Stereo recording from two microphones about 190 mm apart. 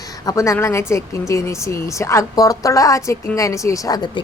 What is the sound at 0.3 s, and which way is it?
Speech, 15° left (ahead or behind).